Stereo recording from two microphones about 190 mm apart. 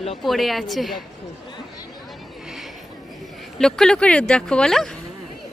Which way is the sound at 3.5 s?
Centre (ahead or behind).